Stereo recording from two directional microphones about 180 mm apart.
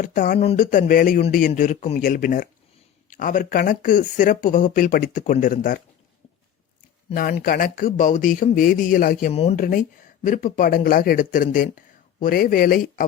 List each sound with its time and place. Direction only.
0.0 s speech: 45° left (ahead or behind)
7.1 s speech: 55° left (ahead or behind)
9.3 s speech: 35° left (ahead or behind)
10.2 s speech: 50° left (ahead or behind)